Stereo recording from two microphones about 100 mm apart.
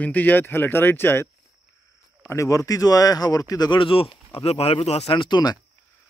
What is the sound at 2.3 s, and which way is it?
Speech, 30° left (ahead or behind).